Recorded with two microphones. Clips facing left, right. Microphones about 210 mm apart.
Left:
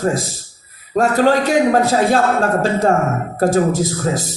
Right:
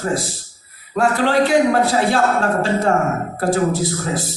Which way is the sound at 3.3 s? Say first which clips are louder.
Left 4 dB; 45° left (ahead or behind).